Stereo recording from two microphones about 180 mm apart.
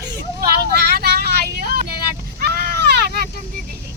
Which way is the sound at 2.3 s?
60° right (ahead or behind).